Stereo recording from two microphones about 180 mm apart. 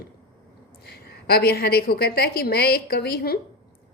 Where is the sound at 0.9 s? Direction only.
60° left (ahead or behind).